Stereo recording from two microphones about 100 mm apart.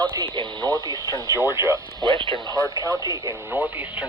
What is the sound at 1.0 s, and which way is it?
Speech, 40° left (ahead or behind).